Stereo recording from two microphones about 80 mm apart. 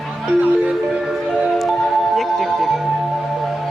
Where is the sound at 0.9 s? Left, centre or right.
Centre.